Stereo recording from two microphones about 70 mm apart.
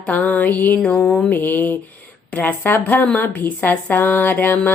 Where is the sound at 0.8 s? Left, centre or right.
Centre.